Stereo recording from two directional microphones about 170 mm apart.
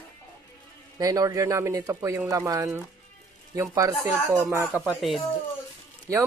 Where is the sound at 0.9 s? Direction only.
20° right (ahead or behind); by 5.2 s 5° right (ahead or behind).